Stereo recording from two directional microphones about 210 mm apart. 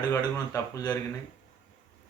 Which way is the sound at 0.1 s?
15° left (ahead or behind).